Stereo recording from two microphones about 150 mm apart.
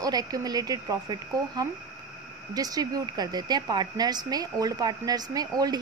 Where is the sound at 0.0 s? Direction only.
25° right (ahead or behind).